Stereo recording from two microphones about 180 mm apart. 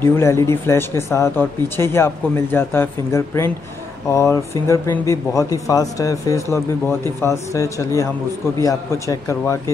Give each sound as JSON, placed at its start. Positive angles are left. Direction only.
{"t": 0.0, "sound": "speech", "side_deg": 15}